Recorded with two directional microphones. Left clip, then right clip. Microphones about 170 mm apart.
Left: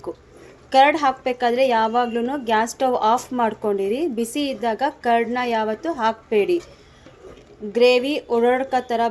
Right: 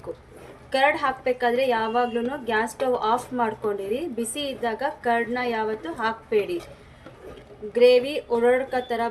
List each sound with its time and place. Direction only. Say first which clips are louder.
0.7 s a woman's voice: left 6 dB; 45° left (ahead or behind)
7.7 s a woman's voice: left 1 dB; 45° left (ahead or behind)